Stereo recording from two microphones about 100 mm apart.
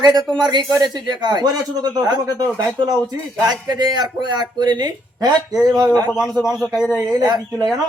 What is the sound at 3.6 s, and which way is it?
A man's voice, 45° right (ahead or behind).